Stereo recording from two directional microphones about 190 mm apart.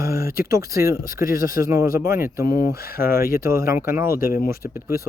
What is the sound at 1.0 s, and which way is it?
Speech, 45° left (ahead or behind).